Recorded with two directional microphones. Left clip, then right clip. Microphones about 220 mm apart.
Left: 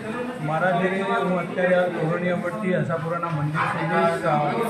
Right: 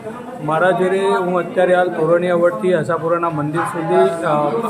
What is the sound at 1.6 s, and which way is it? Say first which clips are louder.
A man's voice: right 6 dB; 25° right (ahead or behind).